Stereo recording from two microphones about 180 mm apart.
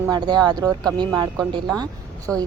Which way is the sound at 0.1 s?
25° right (ahead or behind).